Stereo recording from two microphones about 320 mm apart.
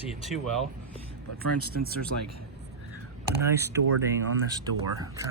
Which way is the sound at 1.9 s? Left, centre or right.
Right.